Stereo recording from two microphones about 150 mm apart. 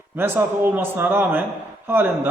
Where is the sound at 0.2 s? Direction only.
15° right (ahead or behind).